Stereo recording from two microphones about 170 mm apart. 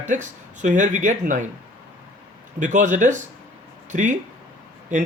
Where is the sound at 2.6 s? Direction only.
45° right (ahead or behind).